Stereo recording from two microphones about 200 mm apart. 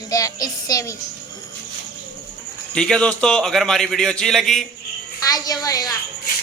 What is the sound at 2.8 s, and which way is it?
A man's voice, 5° left (ahead or behind).